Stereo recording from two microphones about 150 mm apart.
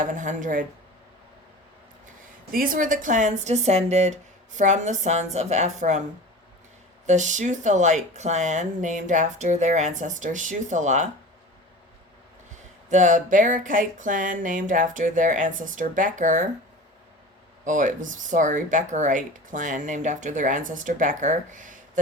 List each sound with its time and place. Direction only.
0.0 s speech: 55° right (ahead or behind)
2.5 s speech: 70° right (ahead or behind)
7.1 s speech: 55° right (ahead or behind)
12.5 s speech: 55° right (ahead or behind)
17.7 s speech: 55° right (ahead or behind)